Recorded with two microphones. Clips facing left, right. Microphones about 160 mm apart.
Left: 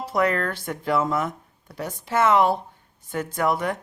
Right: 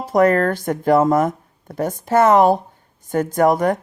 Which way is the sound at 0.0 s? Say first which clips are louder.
Right 8 dB; 45° right (ahead or behind).